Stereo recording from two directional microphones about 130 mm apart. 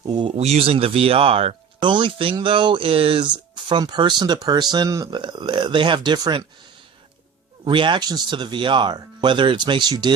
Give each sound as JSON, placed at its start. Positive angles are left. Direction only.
{"t": 0.0, "sound": "speech", "side_deg": -35}
{"t": 0.3, "sound": "speech", "side_deg": -55}
{"t": 7.6, "sound": "speech", "side_deg": -40}